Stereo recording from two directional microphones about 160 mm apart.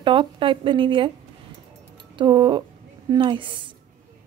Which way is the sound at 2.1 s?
30° right (ahead or behind).